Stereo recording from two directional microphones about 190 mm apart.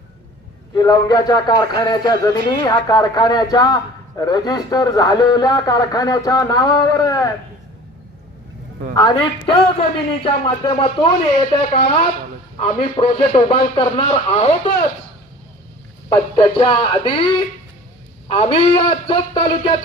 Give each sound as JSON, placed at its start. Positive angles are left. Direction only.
{"t": 0.7, "sound": "a man's voice", "side_deg": 20}
{"t": 9.0, "sound": "a man's voice", "side_deg": 25}
{"t": 16.0, "sound": "a man's voice", "side_deg": 25}